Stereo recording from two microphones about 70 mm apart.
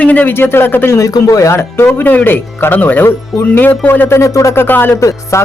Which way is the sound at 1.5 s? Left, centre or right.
Left.